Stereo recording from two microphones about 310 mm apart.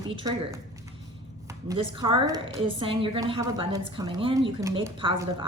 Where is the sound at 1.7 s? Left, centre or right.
Centre.